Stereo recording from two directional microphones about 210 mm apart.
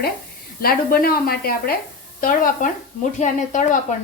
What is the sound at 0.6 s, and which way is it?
A woman's voice, 45° left (ahead or behind).